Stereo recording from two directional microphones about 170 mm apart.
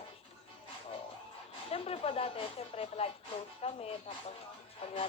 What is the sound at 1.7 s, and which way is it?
Speech, 35° left (ahead or behind).